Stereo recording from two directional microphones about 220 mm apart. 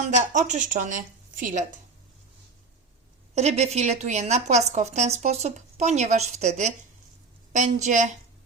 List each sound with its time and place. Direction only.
0.3 s a woman's voice: 35° right (ahead or behind)
3.3 s a woman's voice: 30° right (ahead or behind)